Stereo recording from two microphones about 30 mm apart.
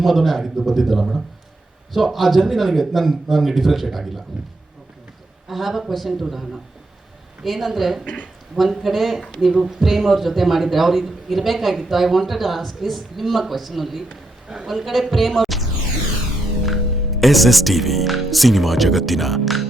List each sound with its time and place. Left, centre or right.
0.0 s a man's voice: centre
5.5 s a man's voice: centre
7.4 s a man's voice: centre
8.0 s speech: left
8.7 s a man's voice: centre
14.5 s a man's voice: centre
14.8 s music: centre
16.6 s speech: centre